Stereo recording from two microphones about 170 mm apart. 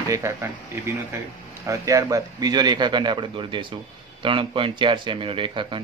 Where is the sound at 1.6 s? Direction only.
20° right (ahead or behind).